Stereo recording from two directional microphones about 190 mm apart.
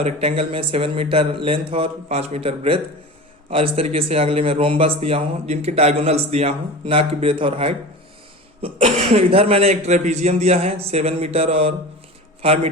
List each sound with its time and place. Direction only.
0.0 s a man's voice: 30° right (ahead or behind)